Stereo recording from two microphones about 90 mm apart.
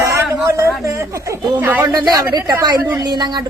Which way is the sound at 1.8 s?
50° right (ahead or behind).